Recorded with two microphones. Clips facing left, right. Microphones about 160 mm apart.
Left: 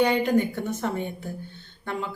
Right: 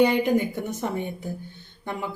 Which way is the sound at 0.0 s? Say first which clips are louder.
Right 1 dB; 15° right (ahead or behind).